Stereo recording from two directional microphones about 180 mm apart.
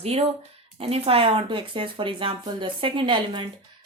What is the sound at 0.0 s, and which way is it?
A woman's voice, 35° right (ahead or behind).